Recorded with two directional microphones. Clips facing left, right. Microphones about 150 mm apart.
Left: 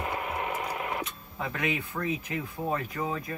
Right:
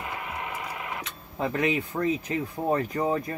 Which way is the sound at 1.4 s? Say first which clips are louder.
Right 5 dB; 30° right (ahead or behind).